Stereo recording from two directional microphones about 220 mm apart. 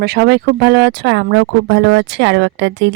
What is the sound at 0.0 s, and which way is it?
Speech, 50° right (ahead or behind).